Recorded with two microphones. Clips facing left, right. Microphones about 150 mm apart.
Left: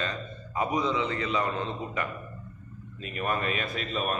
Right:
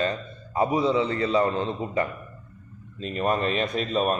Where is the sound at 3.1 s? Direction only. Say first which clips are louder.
Right 5 dB; 35° right (ahead or behind).